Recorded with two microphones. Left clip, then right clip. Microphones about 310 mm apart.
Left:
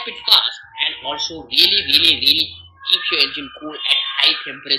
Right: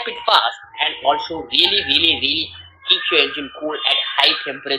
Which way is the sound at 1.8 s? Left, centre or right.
Centre.